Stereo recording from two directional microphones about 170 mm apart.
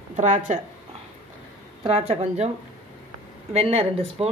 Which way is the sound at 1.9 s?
40° right (ahead or behind).